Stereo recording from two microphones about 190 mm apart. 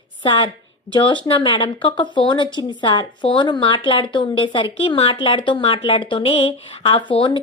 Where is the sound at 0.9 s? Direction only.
25° left (ahead or behind).